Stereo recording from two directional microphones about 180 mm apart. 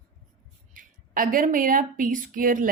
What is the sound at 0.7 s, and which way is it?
Speech, 50° right (ahead or behind).